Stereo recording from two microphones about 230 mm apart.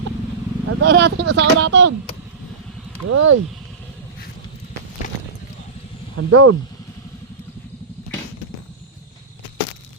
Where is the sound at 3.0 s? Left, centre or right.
Right.